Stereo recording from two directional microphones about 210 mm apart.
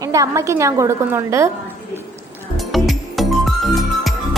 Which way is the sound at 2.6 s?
Centre (ahead or behind).